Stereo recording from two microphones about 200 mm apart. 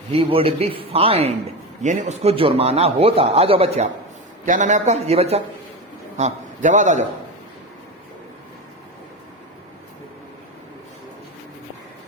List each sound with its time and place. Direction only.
0.1 s a man's voice: 25° right (ahead or behind)